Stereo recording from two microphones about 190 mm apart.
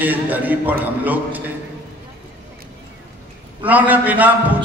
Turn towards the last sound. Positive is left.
turn(degrees=-10)  # may be behind; listen again after turning